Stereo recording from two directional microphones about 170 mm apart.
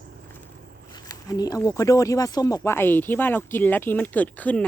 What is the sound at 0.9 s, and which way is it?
Speech, 25° left (ahead or behind).